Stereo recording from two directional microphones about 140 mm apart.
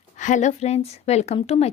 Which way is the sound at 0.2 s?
60° left (ahead or behind).